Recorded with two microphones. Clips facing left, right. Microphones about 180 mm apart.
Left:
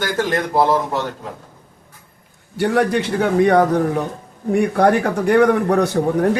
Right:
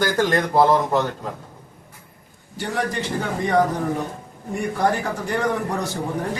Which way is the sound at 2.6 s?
65° left (ahead or behind).